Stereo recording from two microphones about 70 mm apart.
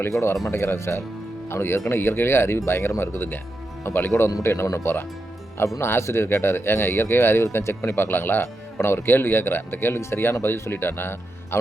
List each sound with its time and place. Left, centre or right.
0.5 s speech: left
4.4 s speech: left